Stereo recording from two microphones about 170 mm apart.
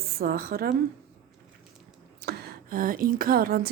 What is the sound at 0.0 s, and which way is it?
Speech, 65° right (ahead or behind).